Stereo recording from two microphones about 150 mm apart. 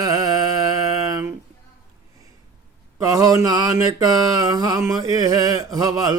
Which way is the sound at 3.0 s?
25° right (ahead or behind).